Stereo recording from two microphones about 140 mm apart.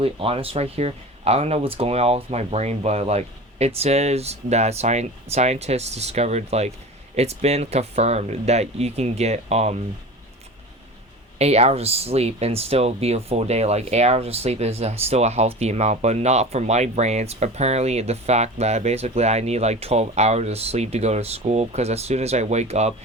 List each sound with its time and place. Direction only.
0.0 s speech: 40° right (ahead or behind)
11.3 s speech: 50° right (ahead or behind)